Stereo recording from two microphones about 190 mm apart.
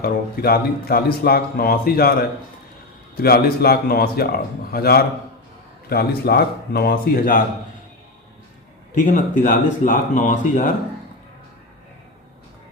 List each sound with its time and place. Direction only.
0.0 s speech: 50° left (ahead or behind)
3.2 s speech: 55° left (ahead or behind)
9.0 s speech: 40° left (ahead or behind)